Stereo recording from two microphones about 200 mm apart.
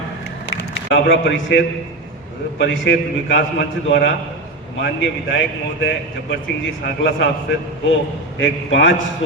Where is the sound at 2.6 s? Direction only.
65° left (ahead or behind).